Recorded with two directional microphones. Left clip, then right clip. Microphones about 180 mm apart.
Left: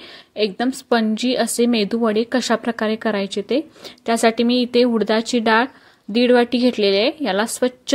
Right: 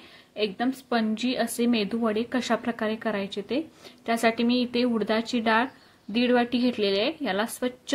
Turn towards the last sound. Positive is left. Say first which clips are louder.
# left 8 dB
turn(degrees=45)  # may be behind; listen again after turning